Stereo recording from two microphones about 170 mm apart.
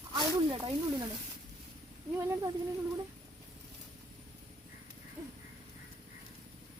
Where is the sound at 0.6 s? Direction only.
20° right (ahead or behind).